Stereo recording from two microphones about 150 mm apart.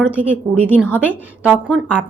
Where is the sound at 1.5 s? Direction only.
5° right (ahead or behind).